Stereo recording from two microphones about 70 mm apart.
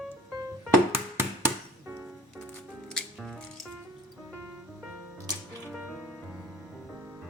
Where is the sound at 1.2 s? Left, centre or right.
Right.